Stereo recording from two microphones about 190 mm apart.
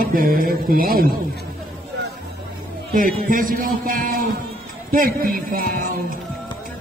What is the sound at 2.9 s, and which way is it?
A man's voice, 45° right (ahead or behind).